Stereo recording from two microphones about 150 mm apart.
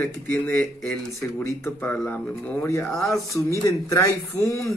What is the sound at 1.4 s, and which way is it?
Speech, 15° left (ahead or behind).